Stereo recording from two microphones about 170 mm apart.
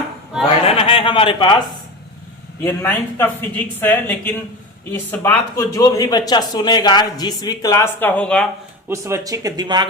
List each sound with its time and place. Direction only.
0.6 s a sound: 35° left (ahead or behind)
2.6 s speech: 10° left (ahead or behind)
8.9 s speech: 15° right (ahead or behind)